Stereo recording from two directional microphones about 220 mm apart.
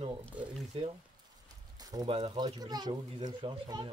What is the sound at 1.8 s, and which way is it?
Speech, 15° right (ahead or behind).